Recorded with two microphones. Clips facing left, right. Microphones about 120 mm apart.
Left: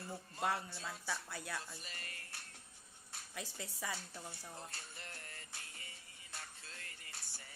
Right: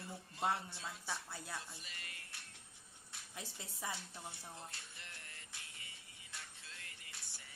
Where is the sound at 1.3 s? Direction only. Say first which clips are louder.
Left 3 dB; 90° left.